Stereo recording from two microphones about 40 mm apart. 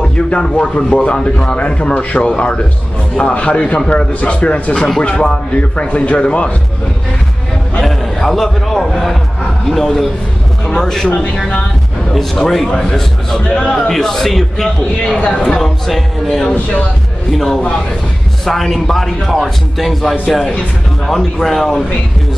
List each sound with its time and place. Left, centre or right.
0.0 s a man's voice: left
7.8 s a sound: centre
9.7 s a man's voice: centre
12.4 s a man's voice: centre
13.4 s a man's voice: left
13.7 s a man's voice: centre